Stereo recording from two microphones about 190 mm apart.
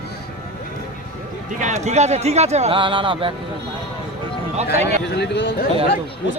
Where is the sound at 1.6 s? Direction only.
35° right (ahead or behind).